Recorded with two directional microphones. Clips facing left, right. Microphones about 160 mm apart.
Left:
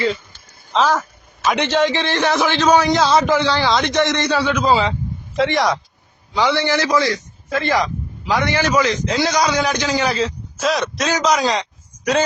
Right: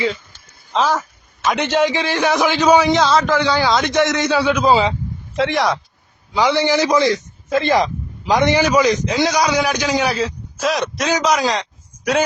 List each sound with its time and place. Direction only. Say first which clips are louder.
0.7 s a man's voice: left 1 dB; 5° right (ahead or behind)
3.1 s a man's voice: left 1 dB; 10° left (ahead or behind)
3.4 s a man's voice: right 1 dB; centre (ahead or behind)
5.4 s a man's voice: even; centre (ahead or behind)
6.3 s a man's voice: right 2 dB; 15° right (ahead or behind)
11.3 s a sound: even; centre (ahead or behind)